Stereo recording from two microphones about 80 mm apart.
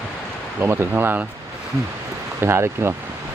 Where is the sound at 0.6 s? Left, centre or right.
Right.